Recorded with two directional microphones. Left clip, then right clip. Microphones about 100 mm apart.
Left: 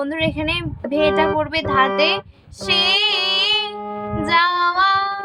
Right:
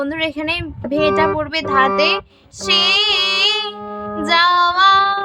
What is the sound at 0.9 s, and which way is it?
Speech, 35° right (ahead or behind).